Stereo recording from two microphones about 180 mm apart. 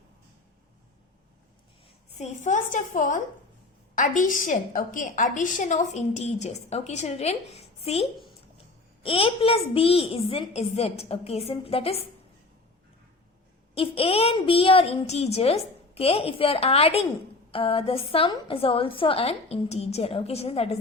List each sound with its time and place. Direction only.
2.1 s a woman's voice: 40° left (ahead or behind)
9.0 s a woman's voice: 30° left (ahead or behind)
13.7 s a woman's voice: 30° left (ahead or behind)